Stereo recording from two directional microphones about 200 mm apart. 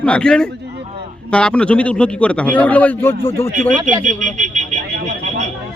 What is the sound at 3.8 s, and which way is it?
Speech, 40° right (ahead or behind).